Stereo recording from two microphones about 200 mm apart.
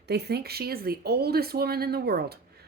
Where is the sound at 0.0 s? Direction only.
55° right (ahead or behind).